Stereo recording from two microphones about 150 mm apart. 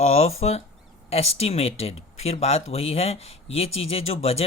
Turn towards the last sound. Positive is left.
turn(degrees=40)  # may be behind; listen again after turning